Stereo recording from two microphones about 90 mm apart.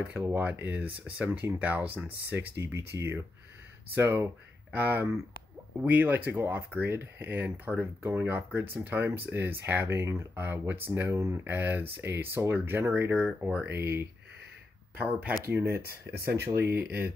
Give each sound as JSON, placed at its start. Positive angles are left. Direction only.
{"t": 0.1, "sound": "speech", "side_deg": -20}
{"t": 15.0, "sound": "speech", "side_deg": -15}
{"t": 15.5, "sound": "speech", "side_deg": -25}